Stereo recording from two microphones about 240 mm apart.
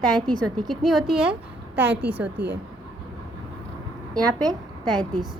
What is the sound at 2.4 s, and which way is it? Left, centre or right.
Speech, right.